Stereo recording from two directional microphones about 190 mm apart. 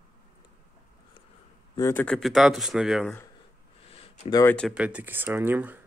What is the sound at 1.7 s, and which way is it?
Speech, 15° left (ahead or behind).